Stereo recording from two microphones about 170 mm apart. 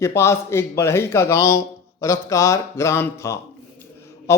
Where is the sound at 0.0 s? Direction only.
15° left (ahead or behind).